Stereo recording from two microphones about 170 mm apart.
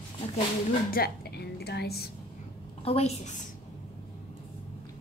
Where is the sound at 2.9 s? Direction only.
40° left (ahead or behind).